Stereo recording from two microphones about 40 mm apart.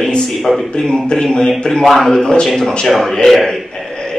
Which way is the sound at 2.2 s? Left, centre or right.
Centre.